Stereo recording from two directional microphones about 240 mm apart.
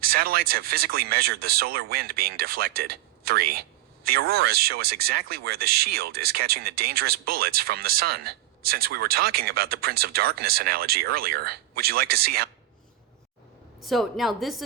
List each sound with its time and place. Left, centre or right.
0.0 s speech: right
13.8 s a woman's voice: centre